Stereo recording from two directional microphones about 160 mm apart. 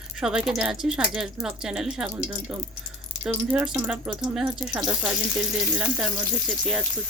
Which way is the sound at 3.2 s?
5° right (ahead or behind).